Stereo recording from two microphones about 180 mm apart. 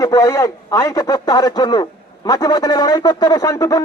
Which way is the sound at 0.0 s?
20° left (ahead or behind).